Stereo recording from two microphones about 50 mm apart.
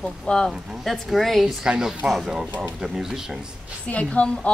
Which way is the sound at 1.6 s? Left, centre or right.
Centre.